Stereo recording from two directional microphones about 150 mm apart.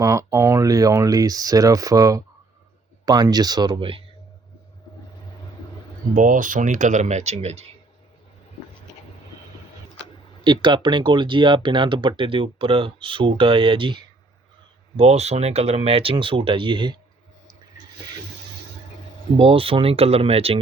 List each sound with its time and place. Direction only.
0.0 s speech: 20° right (ahead or behind); by 4.0 s 35° right (ahead or behind)
6.1 s speech: 60° right (ahead or behind); by 7.7 s 45° right (ahead or behind)
10.4 s speech: 30° right (ahead or behind)
14.9 s speech: 45° right (ahead or behind)
19.4 s speech: 40° right (ahead or behind)